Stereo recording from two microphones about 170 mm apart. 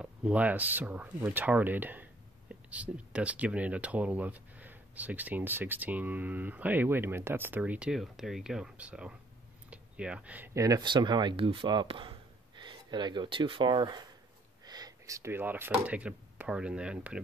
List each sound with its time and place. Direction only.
0.0 s speech: 5° right (ahead or behind)